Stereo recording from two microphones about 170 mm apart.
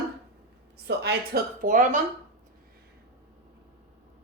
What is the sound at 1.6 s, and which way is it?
Speech, 50° right (ahead or behind).